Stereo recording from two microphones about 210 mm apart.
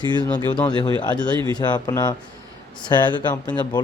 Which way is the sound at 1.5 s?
20° left (ahead or behind).